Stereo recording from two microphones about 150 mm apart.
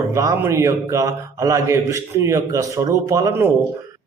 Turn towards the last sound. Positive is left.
turn(degrees=-20)  # may be behind; listen again after turning